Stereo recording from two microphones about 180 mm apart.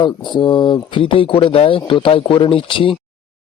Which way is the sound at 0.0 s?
25° left (ahead or behind).